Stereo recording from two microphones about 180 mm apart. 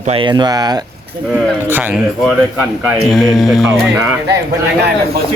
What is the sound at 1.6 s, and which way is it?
Speech, 10° right (ahead or behind).